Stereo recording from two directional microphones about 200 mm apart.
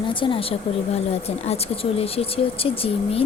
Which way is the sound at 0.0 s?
25° left (ahead or behind).